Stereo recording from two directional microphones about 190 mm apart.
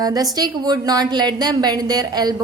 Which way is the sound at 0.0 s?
20° right (ahead or behind).